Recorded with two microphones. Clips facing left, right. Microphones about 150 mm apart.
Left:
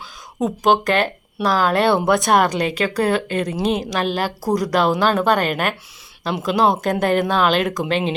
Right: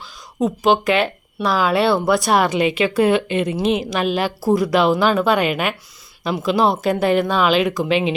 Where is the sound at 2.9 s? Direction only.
40° left (ahead or behind).